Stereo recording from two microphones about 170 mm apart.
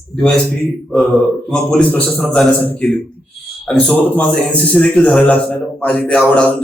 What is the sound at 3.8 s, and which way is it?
A man's voice, 10° left (ahead or behind).